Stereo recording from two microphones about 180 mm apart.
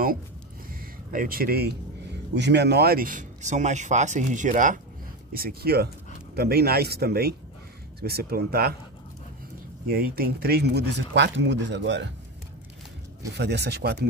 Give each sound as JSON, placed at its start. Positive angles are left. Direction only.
{"t": 1.1, "sound": "speech", "side_deg": -50}
{"t": 2.3, "sound": "speech", "side_deg": -70}
{"t": 5.3, "sound": "speech", "side_deg": -55}
{"t": 9.8, "sound": "speech", "side_deg": -55}
{"t": 13.3, "sound": "speech", "side_deg": -70}